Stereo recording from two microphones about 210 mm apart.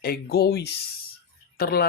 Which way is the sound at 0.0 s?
50° left (ahead or behind).